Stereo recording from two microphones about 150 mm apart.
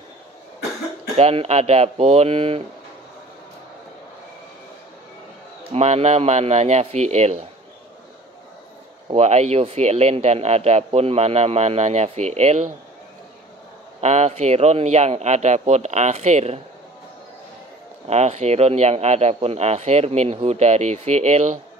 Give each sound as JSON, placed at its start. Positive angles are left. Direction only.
{"t": 1.1, "sound": "speech", "side_deg": -45}
{"t": 5.7, "sound": "speech", "side_deg": -45}
{"t": 9.1, "sound": "speech", "side_deg": -45}
{"t": 14.0, "sound": "speech", "side_deg": -50}
{"t": 18.0, "sound": "speech", "side_deg": -45}